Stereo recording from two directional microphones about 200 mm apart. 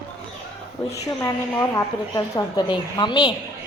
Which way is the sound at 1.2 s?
15° left (ahead or behind).